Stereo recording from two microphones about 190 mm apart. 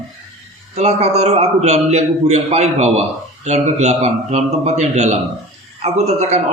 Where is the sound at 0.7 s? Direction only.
35° right (ahead or behind).